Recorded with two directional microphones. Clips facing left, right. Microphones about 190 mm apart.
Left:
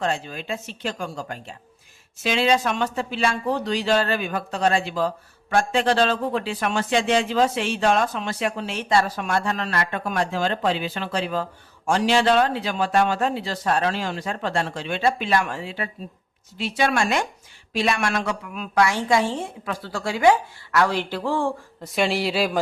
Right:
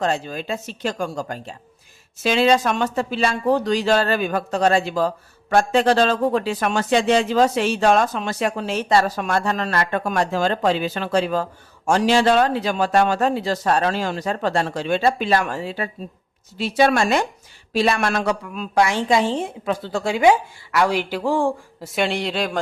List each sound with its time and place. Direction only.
0.0 s a woman's voice: 40° right (ahead or behind); by 21.8 s 15° right (ahead or behind)
21.9 s a woman's voice: centre (ahead or behind)